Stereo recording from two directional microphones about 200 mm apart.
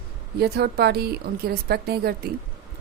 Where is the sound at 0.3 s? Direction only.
55° right (ahead or behind).